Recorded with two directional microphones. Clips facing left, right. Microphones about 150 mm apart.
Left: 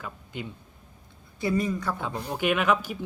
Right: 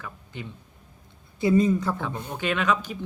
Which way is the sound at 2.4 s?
10° left (ahead or behind).